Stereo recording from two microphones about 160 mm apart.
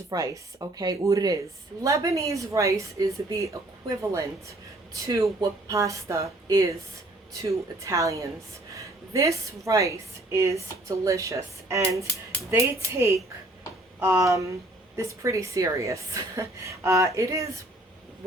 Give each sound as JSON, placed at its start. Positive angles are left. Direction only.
{"t": 0.1, "sound": "a woman's voice", "side_deg": -25}
{"t": 7.9, "sound": "a woman's voice", "side_deg": -20}